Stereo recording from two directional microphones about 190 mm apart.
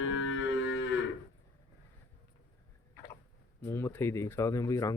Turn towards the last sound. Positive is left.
turn(degrees=15)  # may be behind; listen again after turning